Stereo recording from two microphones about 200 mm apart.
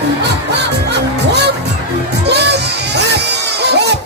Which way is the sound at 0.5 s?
55° right (ahead or behind).